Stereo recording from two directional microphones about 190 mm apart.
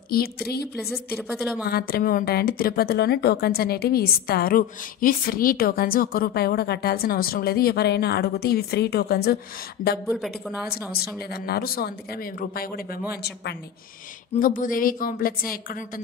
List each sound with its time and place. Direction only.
0.1 s a woman's voice: 55° left (ahead or behind)
0.7 s a woman's voice: centre (ahead or behind)
1.7 s a woman's voice: 55° left (ahead or behind)
10.1 s a woman's voice: centre (ahead or behind)
11.0 s a woman's voice: 55° left (ahead or behind)
14.4 s speech: 45° left (ahead or behind)